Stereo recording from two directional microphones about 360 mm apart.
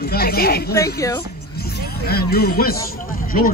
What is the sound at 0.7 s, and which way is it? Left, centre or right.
Speech, centre.